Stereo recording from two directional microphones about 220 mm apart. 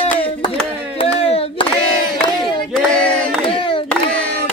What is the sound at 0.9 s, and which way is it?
Hands, 25° left (ahead or behind).